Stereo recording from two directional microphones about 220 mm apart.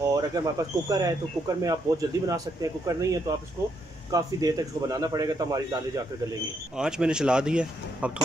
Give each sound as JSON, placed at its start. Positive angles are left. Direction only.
{"t": 0.0, "sound": "speech", "side_deg": -15}
{"t": 6.8, "sound": "speech", "side_deg": -5}